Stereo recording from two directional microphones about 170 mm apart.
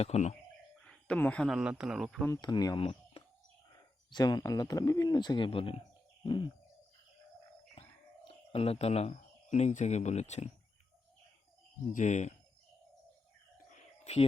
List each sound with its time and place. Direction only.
0.0 s speech: 40° left (ahead or behind)
0.9 s speech: 5° left (ahead or behind)
2.2 s speech: 20° left (ahead or behind)
7.8 s speech: 35° left (ahead or behind)
11.9 s speech: 45° left (ahead or behind)
14.0 s speech: 40° left (ahead or behind)